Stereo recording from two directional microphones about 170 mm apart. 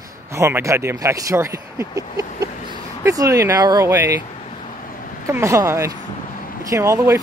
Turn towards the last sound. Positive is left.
turn(degrees=-20)  # may be behind; listen again after turning